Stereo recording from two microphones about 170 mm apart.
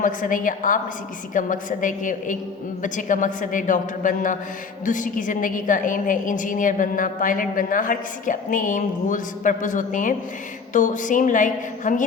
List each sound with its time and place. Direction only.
0.0 s a woman's voice: 50° left (ahead or behind)